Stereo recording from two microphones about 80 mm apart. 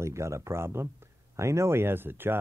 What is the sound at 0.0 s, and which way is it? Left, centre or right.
Speech, right.